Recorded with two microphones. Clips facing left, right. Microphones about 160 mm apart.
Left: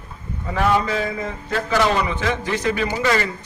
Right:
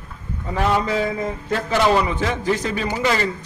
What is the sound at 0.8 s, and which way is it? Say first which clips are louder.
Speech: right 2 dB; 25° right (ahead or behind).